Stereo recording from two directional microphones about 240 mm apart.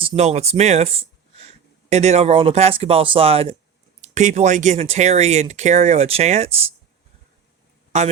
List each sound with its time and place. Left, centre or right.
0.0 s speech: right
7.9 s speech: right